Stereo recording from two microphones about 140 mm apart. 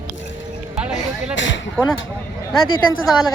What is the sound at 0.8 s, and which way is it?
Speech, 5° right (ahead or behind).